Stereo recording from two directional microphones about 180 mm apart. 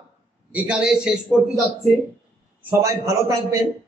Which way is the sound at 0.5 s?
5° right (ahead or behind).